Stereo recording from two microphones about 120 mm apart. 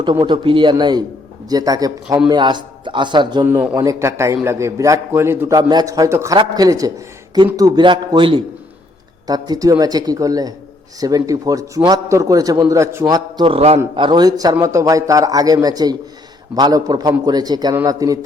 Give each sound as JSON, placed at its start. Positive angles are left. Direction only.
{"t": 0.0, "sound": "speech", "side_deg": -40}
{"t": 3.4, "sound": "speech", "side_deg": -15}
{"t": 3.8, "sound": "a man's voice", "side_deg": -25}
{"t": 5.5, "sound": "a man's voice", "side_deg": -30}
{"t": 7.9, "sound": "a man's voice", "side_deg": -45}
{"t": 9.2, "sound": "a man's voice", "side_deg": -30}
{"t": 13.4, "sound": "a man's voice", "side_deg": -55}
{"t": 13.9, "sound": "a man's voice", "side_deg": -40}